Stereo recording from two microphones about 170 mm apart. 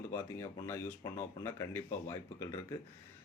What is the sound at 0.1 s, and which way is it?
Speech, 15° left (ahead or behind).